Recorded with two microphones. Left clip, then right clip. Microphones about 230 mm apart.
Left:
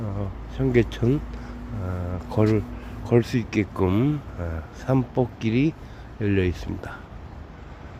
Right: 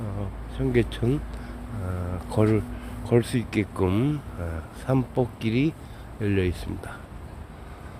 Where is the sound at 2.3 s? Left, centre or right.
Centre.